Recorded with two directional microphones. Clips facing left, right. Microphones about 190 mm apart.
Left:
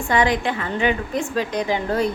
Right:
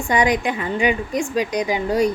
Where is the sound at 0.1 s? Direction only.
15° right (ahead or behind).